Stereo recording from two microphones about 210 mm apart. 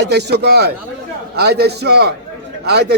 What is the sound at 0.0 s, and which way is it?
A man's voice, 50° right (ahead or behind).